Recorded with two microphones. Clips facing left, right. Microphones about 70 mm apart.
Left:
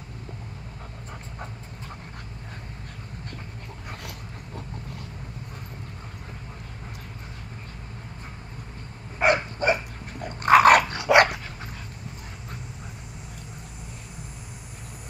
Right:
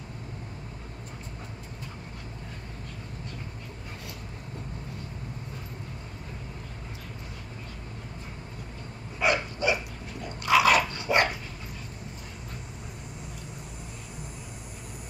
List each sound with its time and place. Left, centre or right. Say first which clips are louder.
9.2 s dog: left 4 dB; left